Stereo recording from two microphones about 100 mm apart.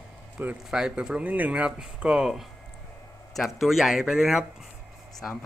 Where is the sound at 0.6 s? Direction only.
5° right (ahead or behind).